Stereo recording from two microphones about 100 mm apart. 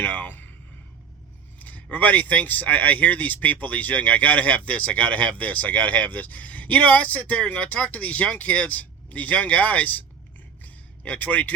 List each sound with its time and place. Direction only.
0.0 s speech: 15° left (ahead or behind)
1.5 s speech: 15° left (ahead or behind)
10.6 s a sound: 15° left (ahead or behind)